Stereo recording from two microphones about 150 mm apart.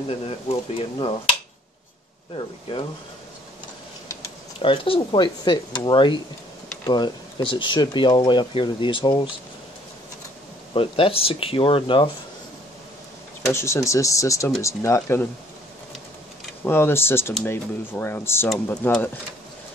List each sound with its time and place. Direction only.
0.5 s speech: 40° left (ahead or behind)
2.3 s speech: 35° left (ahead or behind)
4.6 s speech: 35° left (ahead or behind)
10.7 s speech: 40° left (ahead or behind)
13.5 s speech: 20° left (ahead or behind)
16.6 s speech: 15° left (ahead or behind)